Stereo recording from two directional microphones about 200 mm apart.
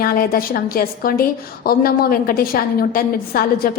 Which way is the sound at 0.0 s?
45° left (ahead or behind).